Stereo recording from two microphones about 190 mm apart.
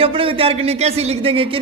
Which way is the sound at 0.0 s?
30° right (ahead or behind).